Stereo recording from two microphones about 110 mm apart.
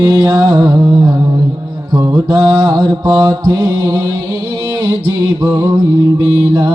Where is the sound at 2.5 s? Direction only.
40° right (ahead or behind).